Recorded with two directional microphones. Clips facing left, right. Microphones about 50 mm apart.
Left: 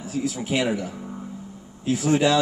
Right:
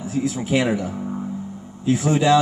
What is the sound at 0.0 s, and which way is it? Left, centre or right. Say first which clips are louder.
A man's voice: right 4 dB; right.